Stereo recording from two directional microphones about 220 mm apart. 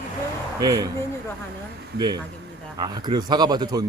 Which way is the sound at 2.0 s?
20° right (ahead or behind).